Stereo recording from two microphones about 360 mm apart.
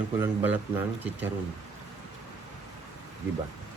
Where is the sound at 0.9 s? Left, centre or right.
Centre.